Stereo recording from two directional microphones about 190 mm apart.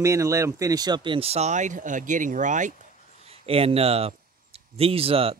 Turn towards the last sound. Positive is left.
turn(degrees=-30)  # may be behind; listen again after turning